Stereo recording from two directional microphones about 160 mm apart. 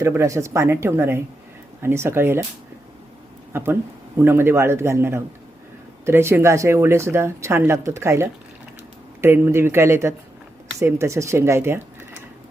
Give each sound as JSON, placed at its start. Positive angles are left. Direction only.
{"t": 0.0, "sound": "a woman's voice", "side_deg": -20}
{"t": 3.5, "sound": "a woman's voice", "side_deg": -15}